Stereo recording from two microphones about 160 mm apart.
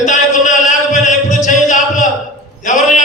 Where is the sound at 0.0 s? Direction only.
50° left (ahead or behind).